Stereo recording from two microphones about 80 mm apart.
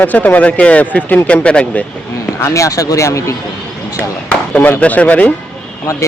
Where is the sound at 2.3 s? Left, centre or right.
Left.